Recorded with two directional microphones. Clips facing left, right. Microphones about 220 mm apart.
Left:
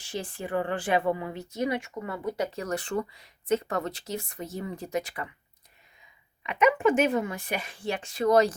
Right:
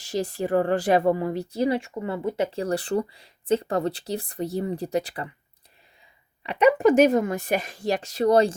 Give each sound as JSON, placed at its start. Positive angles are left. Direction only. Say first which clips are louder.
{"t": 0.0, "sound": "speech", "louder": "right 8 dB", "side_deg": -40}
{"t": 6.4, "sound": "speech", "louder": "right 5 dB", "side_deg": -35}